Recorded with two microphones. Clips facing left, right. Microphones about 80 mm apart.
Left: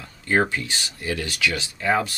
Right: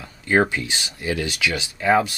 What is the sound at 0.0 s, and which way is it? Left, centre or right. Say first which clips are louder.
Speech: right 2 dB; centre.